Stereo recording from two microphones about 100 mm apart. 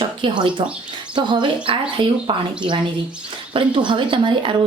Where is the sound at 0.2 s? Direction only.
55° right (ahead or behind).